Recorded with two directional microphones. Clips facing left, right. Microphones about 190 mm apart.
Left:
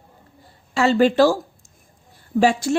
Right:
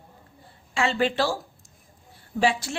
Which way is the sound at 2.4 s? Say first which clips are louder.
Left 6 dB; 45° left (ahead or behind).